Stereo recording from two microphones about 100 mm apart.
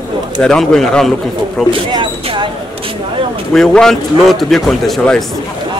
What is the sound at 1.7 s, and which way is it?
Speech, 55° right (ahead or behind).